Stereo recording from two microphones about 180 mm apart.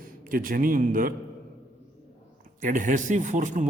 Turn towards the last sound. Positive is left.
turn(degrees=-45)  # may be behind; listen again after turning